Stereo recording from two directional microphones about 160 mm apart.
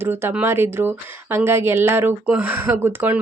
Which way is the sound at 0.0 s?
15° right (ahead or behind).